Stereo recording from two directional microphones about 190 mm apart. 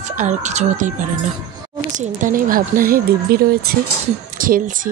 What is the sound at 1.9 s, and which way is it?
A woman's voice, 45° right (ahead or behind).